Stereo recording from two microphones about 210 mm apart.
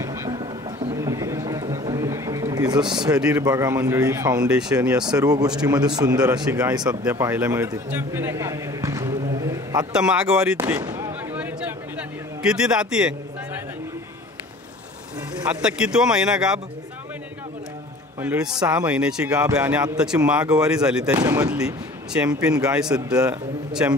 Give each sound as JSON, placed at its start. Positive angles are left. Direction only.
{"t": 0.0, "sound": "music", "side_deg": -15}
{"t": 0.9, "sound": "a sound", "side_deg": -15}
{"t": 2.9, "sound": "speech", "side_deg": -20}
{"t": 3.2, "sound": "a man's voice", "side_deg": -5}
{"t": 3.4, "sound": "a man's voice", "side_deg": -15}
{"t": 4.5, "sound": "a man's voice", "side_deg": -5}
{"t": 5.2, "sound": "a man's voice", "side_deg": -15}
{"t": 9.9, "sound": "a man's voice", "side_deg": -5}
{"t": 15.4, "sound": "a man's voice", "side_deg": -5}
{"t": 18.2, "sound": "a man's voice", "side_deg": -5}
{"t": 21.2, "sound": "a man's voice", "side_deg": -15}
{"t": 21.5, "sound": "a man's voice", "side_deg": -5}
{"t": 22.9, "sound": "a man's voice", "side_deg": -15}